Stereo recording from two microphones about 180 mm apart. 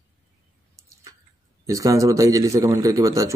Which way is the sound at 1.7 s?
20° right (ahead or behind).